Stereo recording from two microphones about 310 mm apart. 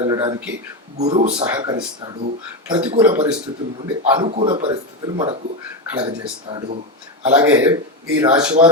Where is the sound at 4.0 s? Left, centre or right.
Centre.